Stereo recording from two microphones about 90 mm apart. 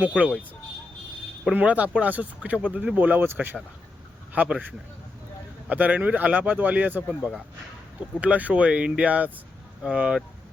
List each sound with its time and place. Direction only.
0.0 s speech: 15° right (ahead or behind)
1.5 s speech: 15° right (ahead or behind)
8.2 s speech: 15° right (ahead or behind)